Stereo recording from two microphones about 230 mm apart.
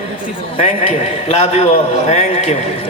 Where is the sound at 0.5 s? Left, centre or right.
Left.